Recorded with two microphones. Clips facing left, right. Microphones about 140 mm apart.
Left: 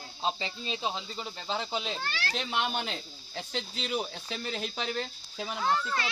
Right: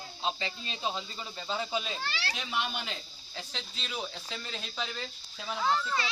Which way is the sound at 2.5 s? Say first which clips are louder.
Left 2 dB; 50° left (ahead or behind).